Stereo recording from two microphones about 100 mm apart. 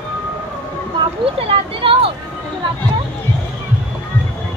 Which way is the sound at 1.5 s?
70° right (ahead or behind).